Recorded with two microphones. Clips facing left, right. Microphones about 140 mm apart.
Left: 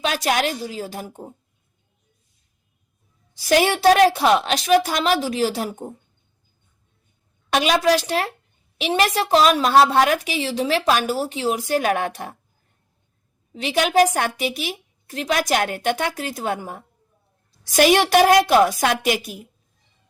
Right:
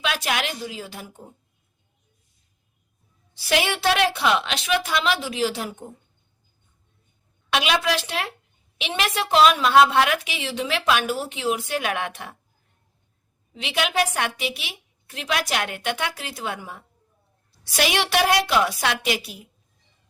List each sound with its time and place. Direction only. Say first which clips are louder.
0.0 s a woman's voice: left 5 dB; 40° left (ahead or behind)
3.3 s a woman's voice: left 6 dB; 40° left (ahead or behind)
7.5 s a woman's voice: left 5 dB; 40° left (ahead or behind)
13.5 s a woman's voice: left 6 dB; 40° left (ahead or behind)